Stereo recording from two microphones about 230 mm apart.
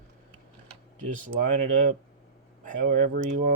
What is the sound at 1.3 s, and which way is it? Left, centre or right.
Speech, right.